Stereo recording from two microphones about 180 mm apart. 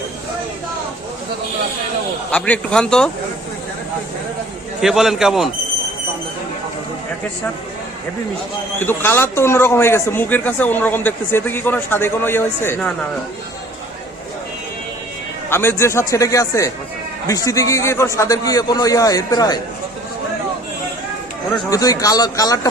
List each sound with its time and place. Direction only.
2.3 s speech: 5° left (ahead or behind)
4.8 s speech: centre (ahead or behind)
8.8 s a man's voice: 10° left (ahead or behind)
15.4 s a man's voice: 15° left (ahead or behind)
21.7 s a man's voice: 20° left (ahead or behind)